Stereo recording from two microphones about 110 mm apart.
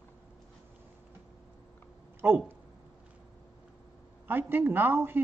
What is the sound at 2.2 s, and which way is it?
Speech, 20° right (ahead or behind).